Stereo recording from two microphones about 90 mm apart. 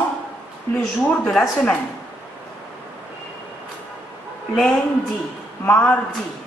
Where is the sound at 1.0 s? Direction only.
15° left (ahead or behind).